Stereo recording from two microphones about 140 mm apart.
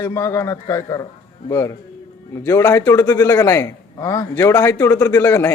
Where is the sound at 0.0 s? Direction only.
20° left (ahead or behind).